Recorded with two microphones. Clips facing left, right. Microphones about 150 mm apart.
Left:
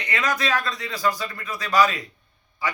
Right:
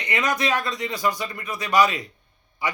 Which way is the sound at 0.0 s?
20° right (ahead or behind).